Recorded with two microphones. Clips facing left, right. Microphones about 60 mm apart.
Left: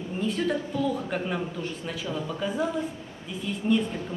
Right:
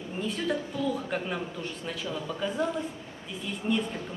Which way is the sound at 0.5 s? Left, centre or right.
Centre.